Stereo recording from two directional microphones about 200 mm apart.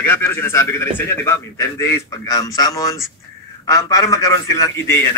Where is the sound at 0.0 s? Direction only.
10° left (ahead or behind).